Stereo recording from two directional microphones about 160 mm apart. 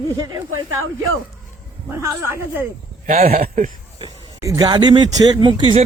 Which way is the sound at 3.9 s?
25° right (ahead or behind).